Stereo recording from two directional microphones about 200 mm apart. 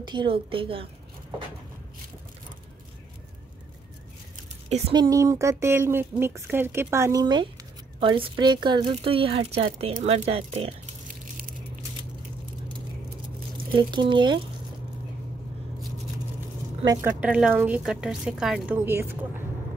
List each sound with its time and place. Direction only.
0.0 s a woman's voice: 25° right (ahead or behind)
4.6 s a woman's voice: 35° right (ahead or behind)
4.9 s a woman's voice: 20° right (ahead or behind)
13.7 s a woman's voice: 25° right (ahead or behind)
16.8 s speech: 20° right (ahead or behind)
17.2 s a woman's voice: 5° right (ahead or behind)